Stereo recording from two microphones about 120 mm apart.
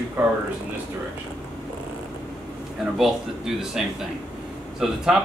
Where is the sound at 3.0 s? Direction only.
5° right (ahead or behind).